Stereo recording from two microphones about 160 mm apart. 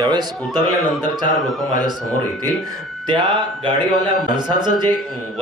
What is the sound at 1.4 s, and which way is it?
Speech, centre (ahead or behind).